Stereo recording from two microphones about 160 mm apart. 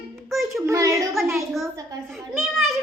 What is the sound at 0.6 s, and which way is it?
Speech, 20° right (ahead or behind).